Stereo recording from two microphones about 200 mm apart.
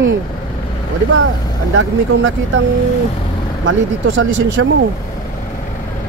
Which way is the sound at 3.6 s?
70° right (ahead or behind).